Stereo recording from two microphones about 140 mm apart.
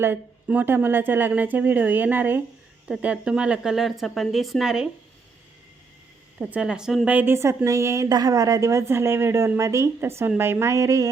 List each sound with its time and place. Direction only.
0.0 s speech: 15° right (ahead or behind)
6.4 s a woman's voice: 5° right (ahead or behind); by 11.1 s 25° right (ahead or behind)